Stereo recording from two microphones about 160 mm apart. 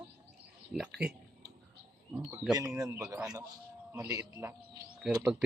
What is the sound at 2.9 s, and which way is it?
A man's voice, 20° right (ahead or behind).